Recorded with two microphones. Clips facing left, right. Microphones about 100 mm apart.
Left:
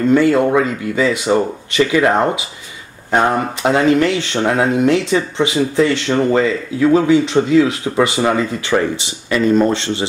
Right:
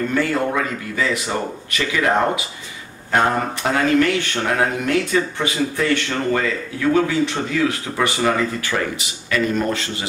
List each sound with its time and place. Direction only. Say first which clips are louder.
0.1 s speech: left 11 dB; 20° left (ahead or behind)